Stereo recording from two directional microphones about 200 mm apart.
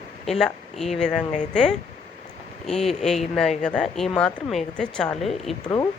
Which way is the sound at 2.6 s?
Centre (ahead or behind).